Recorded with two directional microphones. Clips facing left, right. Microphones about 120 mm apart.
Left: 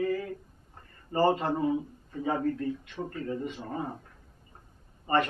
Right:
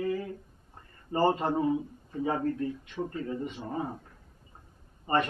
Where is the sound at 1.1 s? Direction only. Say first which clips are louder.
Even; centre (ahead or behind).